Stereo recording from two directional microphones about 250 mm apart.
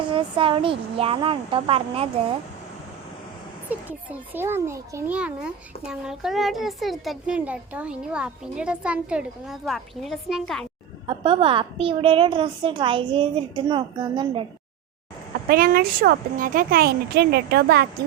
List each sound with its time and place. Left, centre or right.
0.1 s a woman's voice: centre
3.7 s a child's voice: centre
11.0 s a woman's voice: right
15.4 s speech: right